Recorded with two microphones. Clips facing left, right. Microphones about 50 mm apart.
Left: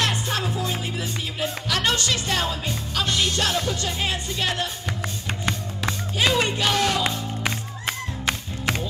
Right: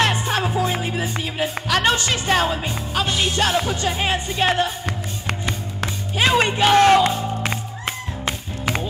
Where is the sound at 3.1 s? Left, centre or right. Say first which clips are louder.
Right 3 dB; centre.